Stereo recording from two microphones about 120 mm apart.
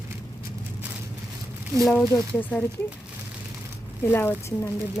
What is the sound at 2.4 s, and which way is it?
Speech, 15° left (ahead or behind).